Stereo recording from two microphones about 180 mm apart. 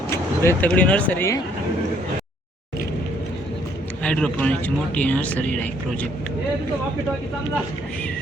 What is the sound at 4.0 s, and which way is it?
Speech, 5° left (ahead or behind).